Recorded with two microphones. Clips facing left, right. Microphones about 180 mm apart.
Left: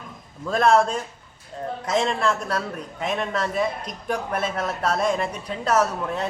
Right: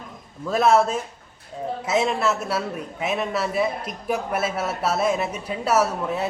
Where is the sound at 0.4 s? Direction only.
5° right (ahead or behind).